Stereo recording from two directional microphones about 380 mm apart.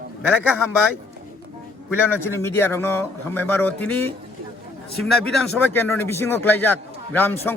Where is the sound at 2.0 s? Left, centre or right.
Centre.